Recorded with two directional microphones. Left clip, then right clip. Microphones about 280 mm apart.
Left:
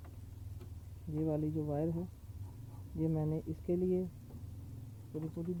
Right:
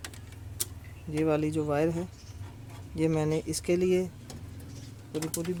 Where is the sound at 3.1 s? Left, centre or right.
Right.